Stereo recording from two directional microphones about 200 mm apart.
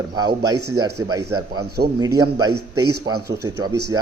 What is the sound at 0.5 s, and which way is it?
Speech, 90° right.